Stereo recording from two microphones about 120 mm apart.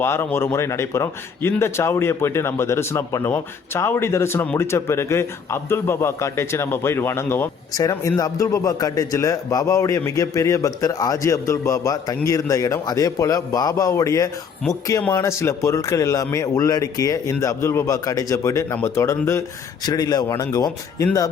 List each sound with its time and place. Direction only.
0.0 s a man's voice: 20° left (ahead or behind)
7.7 s a man's voice: 30° left (ahead or behind)
19.8 s a man's voice: 35° left (ahead or behind)